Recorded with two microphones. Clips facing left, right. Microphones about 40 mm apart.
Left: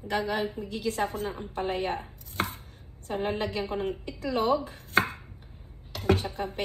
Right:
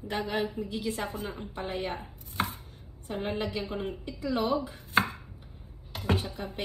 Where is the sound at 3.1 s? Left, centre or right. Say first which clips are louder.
Left 3 dB; left.